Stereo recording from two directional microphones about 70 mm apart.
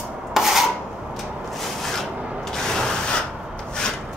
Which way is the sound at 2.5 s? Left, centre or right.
Centre.